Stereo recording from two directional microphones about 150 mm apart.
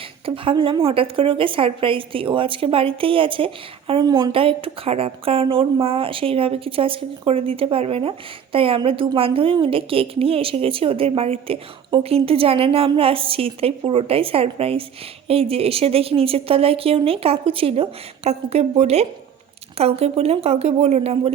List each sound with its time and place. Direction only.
0.3 s a woman's voice: 35° right (ahead or behind)